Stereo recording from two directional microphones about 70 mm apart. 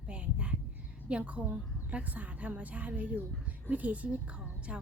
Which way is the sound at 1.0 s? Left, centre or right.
Centre.